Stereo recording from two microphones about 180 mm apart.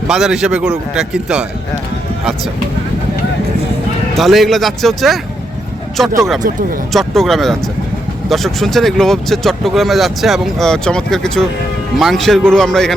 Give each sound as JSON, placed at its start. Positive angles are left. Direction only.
{"t": 0.1, "sound": "speech", "side_deg": -5}
{"t": 4.2, "sound": "speech", "side_deg": 0}